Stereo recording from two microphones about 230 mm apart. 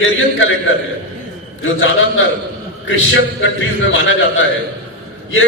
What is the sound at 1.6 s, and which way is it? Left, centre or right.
Speech, left.